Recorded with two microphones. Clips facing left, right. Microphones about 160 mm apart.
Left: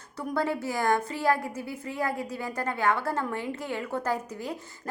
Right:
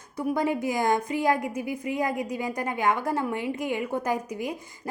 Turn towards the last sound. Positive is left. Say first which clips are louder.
# right 2 dB
turn(degrees=-15)  # may be behind; listen again after turning